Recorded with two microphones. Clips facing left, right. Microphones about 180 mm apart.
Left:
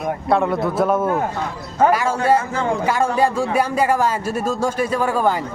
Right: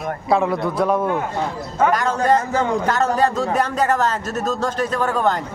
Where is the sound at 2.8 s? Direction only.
10° left (ahead or behind).